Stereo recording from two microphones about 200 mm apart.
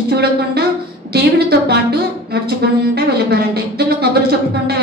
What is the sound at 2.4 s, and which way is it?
A woman's voice, 55° right (ahead or behind).